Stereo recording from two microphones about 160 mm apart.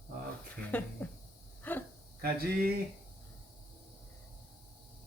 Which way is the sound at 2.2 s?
70° right (ahead or behind).